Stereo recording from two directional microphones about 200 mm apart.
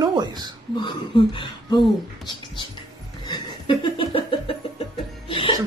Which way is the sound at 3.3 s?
25° left (ahead or behind).